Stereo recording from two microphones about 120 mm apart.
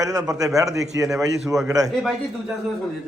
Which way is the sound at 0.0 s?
30° right (ahead or behind).